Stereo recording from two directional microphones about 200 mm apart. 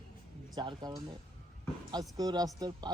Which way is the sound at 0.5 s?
20° right (ahead or behind).